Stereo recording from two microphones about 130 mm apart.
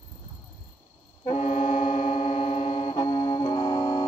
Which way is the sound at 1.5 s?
90° left.